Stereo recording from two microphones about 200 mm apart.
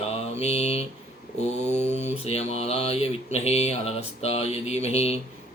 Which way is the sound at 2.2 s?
30° left (ahead or behind).